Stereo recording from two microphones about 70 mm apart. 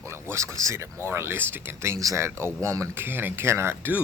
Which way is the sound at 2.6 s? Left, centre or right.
Right.